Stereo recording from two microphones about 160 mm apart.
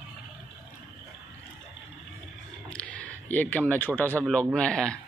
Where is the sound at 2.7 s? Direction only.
10° left (ahead or behind).